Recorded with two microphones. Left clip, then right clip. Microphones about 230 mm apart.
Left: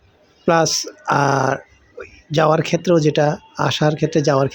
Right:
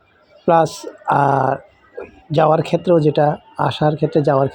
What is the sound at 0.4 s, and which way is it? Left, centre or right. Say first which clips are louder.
Speech: right 2 dB; centre.